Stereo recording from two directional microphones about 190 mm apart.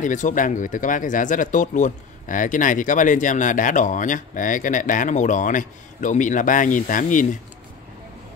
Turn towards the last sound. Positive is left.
turn(degrees=45)  # may be behind; listen again after turning